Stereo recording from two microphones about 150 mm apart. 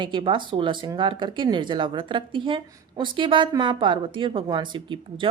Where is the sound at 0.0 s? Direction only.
35° right (ahead or behind).